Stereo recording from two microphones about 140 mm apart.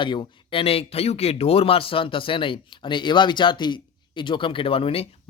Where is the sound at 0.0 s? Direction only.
35° left (ahead or behind).